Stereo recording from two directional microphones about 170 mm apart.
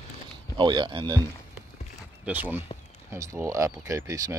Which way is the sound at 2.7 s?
35° left (ahead or behind).